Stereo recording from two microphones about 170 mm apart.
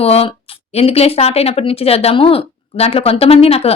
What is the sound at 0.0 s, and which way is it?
A woman's voice, 35° left (ahead or behind).